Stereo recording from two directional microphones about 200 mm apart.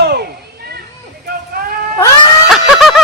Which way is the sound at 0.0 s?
55° right (ahead or behind).